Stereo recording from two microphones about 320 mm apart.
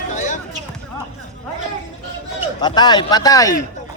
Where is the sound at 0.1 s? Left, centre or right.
Left.